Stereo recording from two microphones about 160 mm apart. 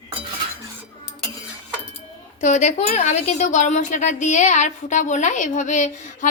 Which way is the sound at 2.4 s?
45° left (ahead or behind).